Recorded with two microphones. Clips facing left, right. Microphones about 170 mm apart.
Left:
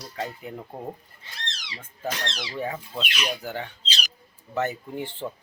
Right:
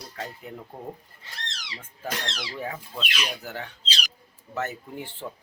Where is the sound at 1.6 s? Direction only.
15° left (ahead or behind).